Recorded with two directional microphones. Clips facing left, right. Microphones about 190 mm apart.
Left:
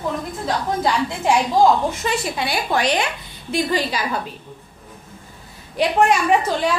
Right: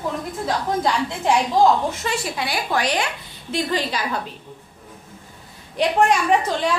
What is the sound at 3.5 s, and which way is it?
Speech, 10° left (ahead or behind).